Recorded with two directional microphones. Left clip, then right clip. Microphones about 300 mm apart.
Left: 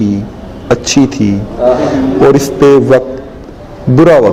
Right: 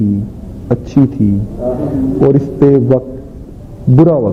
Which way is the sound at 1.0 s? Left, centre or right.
Left.